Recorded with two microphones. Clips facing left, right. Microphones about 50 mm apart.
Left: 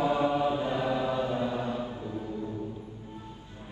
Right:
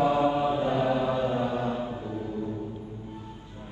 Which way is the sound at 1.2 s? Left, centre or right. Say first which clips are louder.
Right 3 dB; right.